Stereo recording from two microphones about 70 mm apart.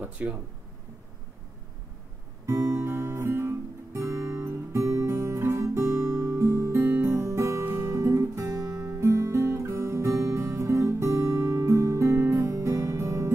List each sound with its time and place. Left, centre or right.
0.0 s speech: right
2.4 s guitar: right